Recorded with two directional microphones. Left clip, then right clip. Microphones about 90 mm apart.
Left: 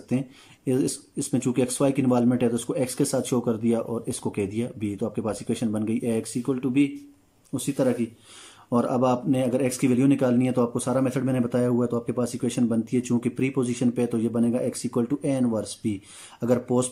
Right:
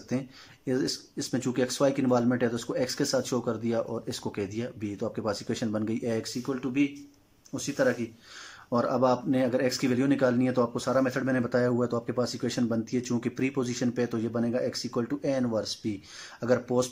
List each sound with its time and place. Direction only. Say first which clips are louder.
0.1 s speech: left 4 dB; 35° left (ahead or behind)